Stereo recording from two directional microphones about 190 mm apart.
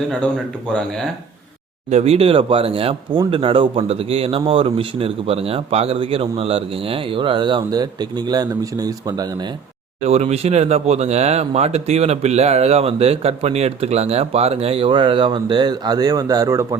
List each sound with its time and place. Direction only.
0.1 s speech: 5° left (ahead or behind)
1.9 s speech: 35° right (ahead or behind)
10.0 s speech: 35° right (ahead or behind); by 16.6 s 15° right (ahead or behind)